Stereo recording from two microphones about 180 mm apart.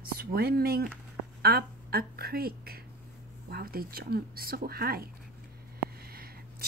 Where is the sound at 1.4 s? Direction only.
60° right (ahead or behind).